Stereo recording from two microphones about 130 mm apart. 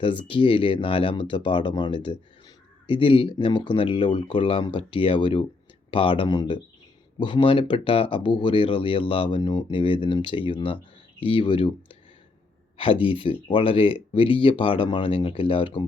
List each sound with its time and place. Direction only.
0.0 s speech: 40° left (ahead or behind)
12.7 s speech: 40° left (ahead or behind)